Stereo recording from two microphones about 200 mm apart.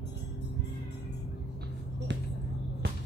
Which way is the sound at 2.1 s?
60° right (ahead or behind).